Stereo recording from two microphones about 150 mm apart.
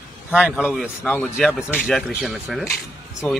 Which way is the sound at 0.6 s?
5° left (ahead or behind).